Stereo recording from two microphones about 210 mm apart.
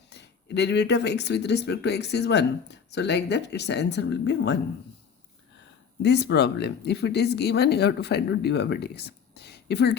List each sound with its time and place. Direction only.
0.1 s speech: 55° left (ahead or behind)
6.0 s speech: 55° left (ahead or behind)